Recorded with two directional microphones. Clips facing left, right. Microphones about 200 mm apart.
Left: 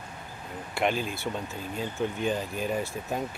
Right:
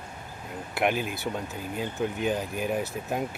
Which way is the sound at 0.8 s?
15° right (ahead or behind).